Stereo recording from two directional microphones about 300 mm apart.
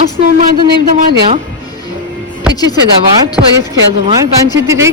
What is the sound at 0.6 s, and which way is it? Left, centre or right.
Speech, right.